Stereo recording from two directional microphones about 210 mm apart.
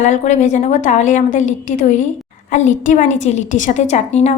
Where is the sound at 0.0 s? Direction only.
35° left (ahead or behind).